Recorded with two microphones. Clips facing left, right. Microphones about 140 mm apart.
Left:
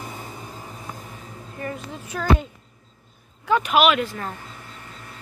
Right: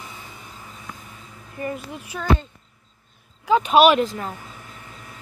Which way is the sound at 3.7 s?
35° right (ahead or behind).